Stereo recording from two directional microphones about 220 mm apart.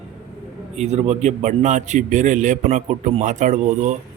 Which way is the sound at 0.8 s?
30° right (ahead or behind).